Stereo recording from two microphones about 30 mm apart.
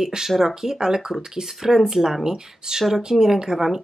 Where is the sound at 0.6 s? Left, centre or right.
Right.